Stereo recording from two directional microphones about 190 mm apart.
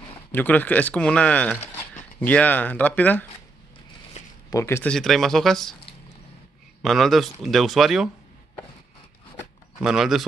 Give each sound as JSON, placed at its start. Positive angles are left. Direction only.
{"t": 0.3, "sound": "speech", "side_deg": 10}
{"t": 4.2, "sound": "a sound", "side_deg": 40}
{"t": 4.5, "sound": "speech", "side_deg": 15}
{"t": 4.9, "sound": "speech", "side_deg": 0}
{"t": 6.8, "sound": "speech", "side_deg": 0}
{"t": 9.8, "sound": "speech", "side_deg": -5}